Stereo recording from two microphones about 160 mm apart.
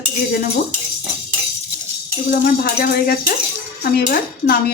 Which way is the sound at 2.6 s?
70° left (ahead or behind).